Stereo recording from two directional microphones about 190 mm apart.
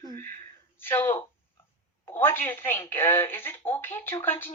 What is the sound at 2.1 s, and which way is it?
Speech, 10° left (ahead or behind).